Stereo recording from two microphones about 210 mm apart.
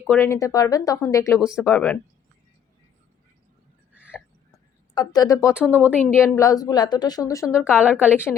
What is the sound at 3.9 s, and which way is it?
Hiccup, 5° right (ahead or behind).